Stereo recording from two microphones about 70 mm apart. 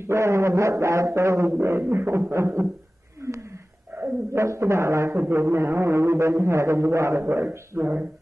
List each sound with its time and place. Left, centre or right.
0.0 s a man's voice: right
1.6 s a sound: right
3.9 s dog: right
4.3 s a man's voice: right
5.3 s a sound: right
7.7 s speech: right